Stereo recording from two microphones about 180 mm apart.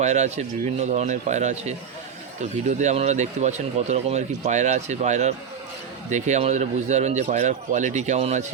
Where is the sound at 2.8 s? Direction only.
40° right (ahead or behind).